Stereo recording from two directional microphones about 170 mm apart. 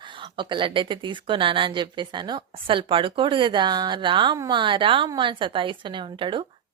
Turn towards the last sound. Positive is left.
turn(degrees=-30)  # may be behind; listen again after turning